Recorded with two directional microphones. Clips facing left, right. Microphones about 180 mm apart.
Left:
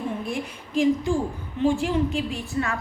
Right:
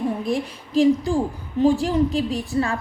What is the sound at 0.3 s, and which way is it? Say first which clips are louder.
A woman's voice: right 6 dB; 35° right (ahead or behind).